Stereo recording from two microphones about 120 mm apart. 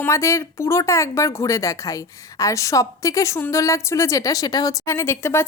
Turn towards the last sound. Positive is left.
turn(degrees=20)  # may be behind; listen again after turning